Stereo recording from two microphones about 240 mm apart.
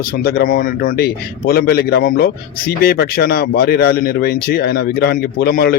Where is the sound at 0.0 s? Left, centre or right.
Left.